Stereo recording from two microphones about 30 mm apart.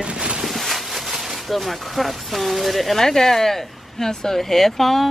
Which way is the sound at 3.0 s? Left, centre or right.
Centre.